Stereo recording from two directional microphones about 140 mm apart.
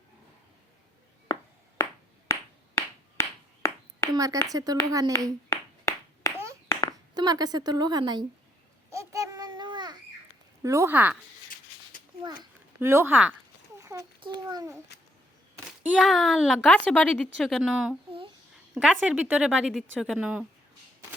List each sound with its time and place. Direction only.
1.8 s a sound: 20° left (ahead or behind)
4.1 s a woman's voice: 25° right (ahead or behind)
5.5 s clapping: 20° left (ahead or behind)
7.1 s a woman's voice: 30° right (ahead or behind)
8.9 s babbling: 20° right (ahead or behind)
10.6 s speech: 20° right (ahead or behind)
12.8 s speech: 15° right (ahead or behind)
13.8 s a sound: 25° right (ahead or behind)
14.2 s a child's voice: 35° right (ahead or behind)
16.0 s a woman's voice: centre (ahead or behind)